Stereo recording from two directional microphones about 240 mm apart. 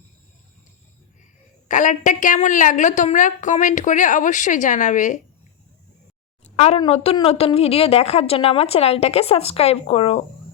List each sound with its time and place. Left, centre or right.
1.6 s a woman's voice: left
6.4 s a woman's voice: left